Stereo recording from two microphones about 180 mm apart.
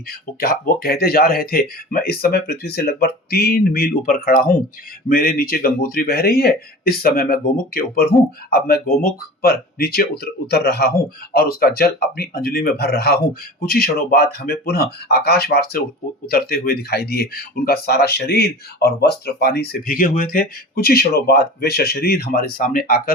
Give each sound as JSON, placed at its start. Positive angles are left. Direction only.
{"t": 0.3, "sound": "speech", "side_deg": 55}